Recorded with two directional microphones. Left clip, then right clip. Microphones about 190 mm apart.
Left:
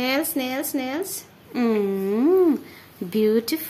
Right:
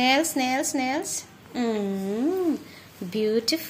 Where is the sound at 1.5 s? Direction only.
45° left (ahead or behind).